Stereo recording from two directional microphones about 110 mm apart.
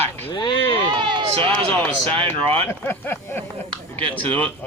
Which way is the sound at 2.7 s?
20° left (ahead or behind).